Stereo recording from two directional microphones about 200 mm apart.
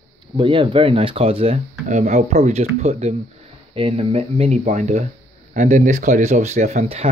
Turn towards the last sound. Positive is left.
turn(degrees=-35)  # may be behind; listen again after turning